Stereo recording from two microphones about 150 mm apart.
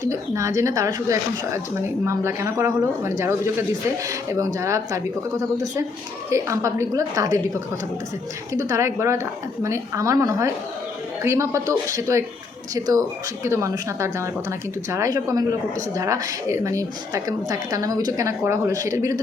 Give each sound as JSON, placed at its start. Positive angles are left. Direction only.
{"t": 0.0, "sound": "speech", "side_deg": -20}
{"t": 6.3, "sound": "speech", "side_deg": -20}
{"t": 8.5, "sound": "speech", "side_deg": -20}